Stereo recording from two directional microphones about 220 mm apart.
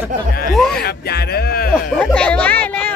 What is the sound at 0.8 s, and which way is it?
Music, 45° left (ahead or behind).